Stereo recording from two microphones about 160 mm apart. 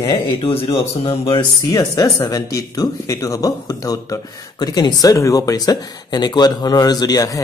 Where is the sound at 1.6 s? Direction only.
20° left (ahead or behind).